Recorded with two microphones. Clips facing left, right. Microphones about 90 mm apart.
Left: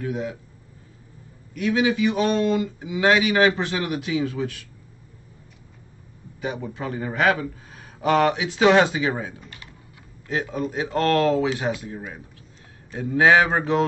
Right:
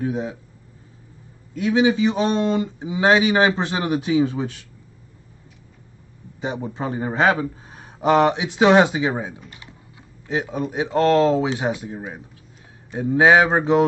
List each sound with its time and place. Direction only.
0.0 s speech: 25° right (ahead or behind)
1.5 s speech: 25° right (ahead or behind)
6.4 s speech: 25° right (ahead or behind)
9.5 s typing: 20° right (ahead or behind)
10.2 s speech: 20° right (ahead or behind)